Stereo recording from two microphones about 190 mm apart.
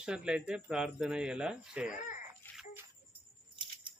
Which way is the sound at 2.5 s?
10° left (ahead or behind).